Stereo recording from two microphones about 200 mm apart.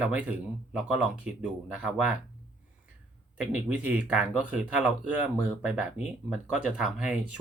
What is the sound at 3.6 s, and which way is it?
Speech, 5° right (ahead or behind).